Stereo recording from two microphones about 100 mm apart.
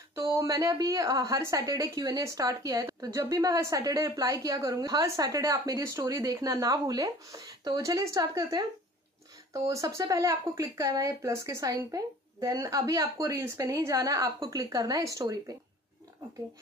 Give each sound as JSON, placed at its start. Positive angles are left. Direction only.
{"t": 0.1, "sound": "a woman's voice", "side_deg": -30}